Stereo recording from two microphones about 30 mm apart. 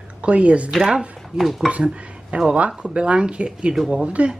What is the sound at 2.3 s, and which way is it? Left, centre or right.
Speech, right.